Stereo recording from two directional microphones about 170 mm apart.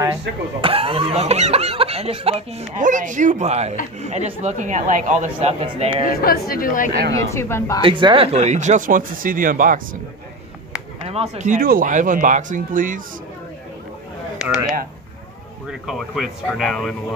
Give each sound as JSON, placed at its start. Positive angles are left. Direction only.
{"t": 0.6, "sound": "speech", "side_deg": -35}
{"t": 6.0, "sound": "speech", "side_deg": 60}
{"t": 6.9, "sound": "speech", "side_deg": -80}
{"t": 7.2, "sound": "speech", "side_deg": 15}
{"t": 7.8, "sound": "speech", "side_deg": -30}
{"t": 11.1, "sound": "speech", "side_deg": -40}
{"t": 15.9, "sound": "speech", "side_deg": 0}